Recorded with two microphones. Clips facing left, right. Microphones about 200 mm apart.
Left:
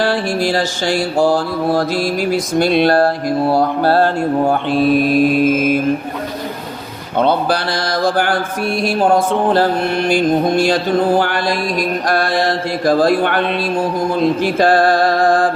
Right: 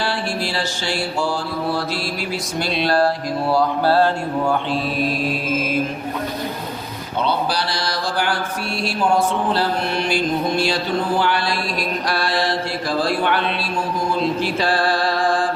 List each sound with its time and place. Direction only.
0.4 s mantra: 50° left (ahead or behind)
0.9 s mantra: 90° left
2.3 s mantra: 50° left (ahead or behind)
7.2 s mantra: 55° left (ahead or behind)
9.0 s mantra: 60° left (ahead or behind)
14.4 s music: 50° left (ahead or behind)